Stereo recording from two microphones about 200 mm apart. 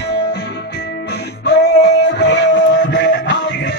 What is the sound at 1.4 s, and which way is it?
Music, 55° left (ahead or behind).